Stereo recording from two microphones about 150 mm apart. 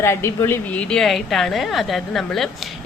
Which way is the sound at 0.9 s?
Centre (ahead or behind).